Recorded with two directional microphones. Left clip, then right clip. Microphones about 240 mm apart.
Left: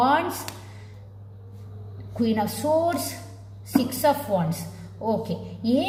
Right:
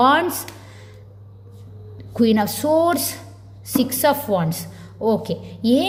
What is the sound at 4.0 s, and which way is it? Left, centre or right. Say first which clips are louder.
A woman's voice: right 4 dB; right.